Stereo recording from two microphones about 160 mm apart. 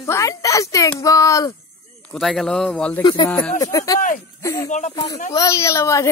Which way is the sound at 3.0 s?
30° left (ahead or behind).